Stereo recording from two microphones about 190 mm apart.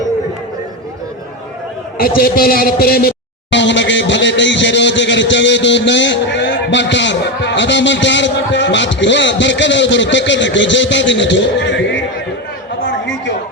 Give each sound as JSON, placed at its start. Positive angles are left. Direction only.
{"t": 2.0, "sound": "a man's voice", "side_deg": 50}
{"t": 3.5, "sound": "speech", "side_deg": 70}
{"t": 12.8, "sound": "chatter", "side_deg": 75}